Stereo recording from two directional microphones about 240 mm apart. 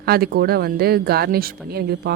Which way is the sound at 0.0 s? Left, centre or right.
Right.